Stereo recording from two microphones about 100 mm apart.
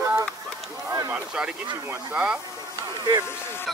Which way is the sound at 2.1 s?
10° right (ahead or behind).